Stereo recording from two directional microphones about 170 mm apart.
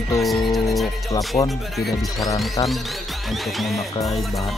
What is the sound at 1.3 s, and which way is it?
Speech, 30° left (ahead or behind).